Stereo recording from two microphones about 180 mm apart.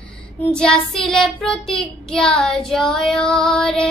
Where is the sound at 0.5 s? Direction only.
5° left (ahead or behind).